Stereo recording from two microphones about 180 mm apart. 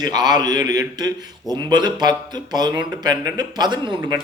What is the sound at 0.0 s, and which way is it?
A man's voice, 20° right (ahead or behind).